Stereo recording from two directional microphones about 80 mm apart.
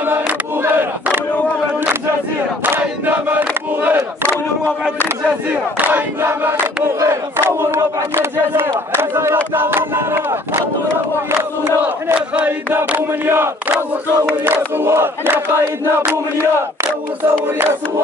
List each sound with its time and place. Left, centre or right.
0.1 s a sound: right
2.8 s crowd: right
5.5 s crowd: right
7.0 s battle cry: right
12.4 s battle cry: right
13.7 s crowd: right